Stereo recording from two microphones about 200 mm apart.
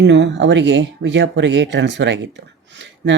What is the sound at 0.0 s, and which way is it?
Speech, 60° right (ahead or behind).